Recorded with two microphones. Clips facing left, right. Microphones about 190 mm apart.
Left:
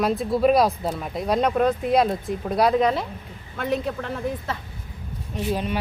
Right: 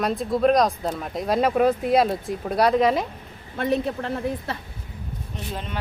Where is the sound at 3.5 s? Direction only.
25° right (ahead or behind).